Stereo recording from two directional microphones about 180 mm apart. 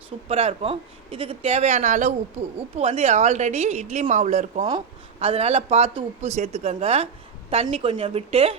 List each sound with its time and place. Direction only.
0.3 s speech: 35° right (ahead or behind)